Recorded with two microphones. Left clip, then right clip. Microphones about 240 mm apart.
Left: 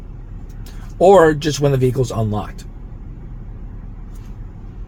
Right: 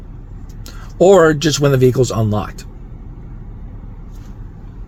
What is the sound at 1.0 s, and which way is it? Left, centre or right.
Speech, right.